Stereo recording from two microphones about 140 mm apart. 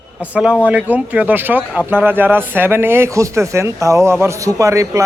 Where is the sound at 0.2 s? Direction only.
10° right (ahead or behind).